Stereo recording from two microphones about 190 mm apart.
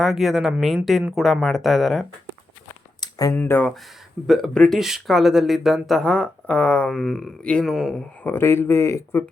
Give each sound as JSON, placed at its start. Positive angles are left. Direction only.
{"t": 0.0, "sound": "speech", "side_deg": 0}
{"t": 3.0, "sound": "a sound", "side_deg": 20}
{"t": 3.3, "sound": "speech", "side_deg": 10}